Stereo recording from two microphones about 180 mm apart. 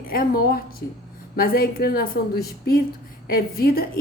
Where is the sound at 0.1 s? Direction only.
55° left (ahead or behind).